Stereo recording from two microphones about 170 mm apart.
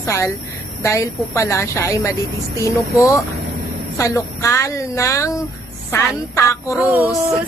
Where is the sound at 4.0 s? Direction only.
20° left (ahead or behind).